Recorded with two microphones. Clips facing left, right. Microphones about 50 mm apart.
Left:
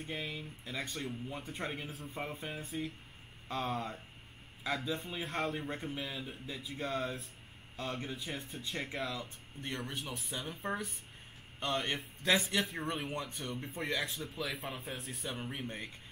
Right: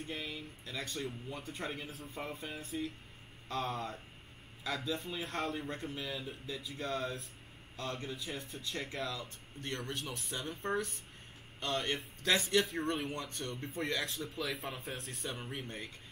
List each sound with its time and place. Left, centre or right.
0.0 s speech: centre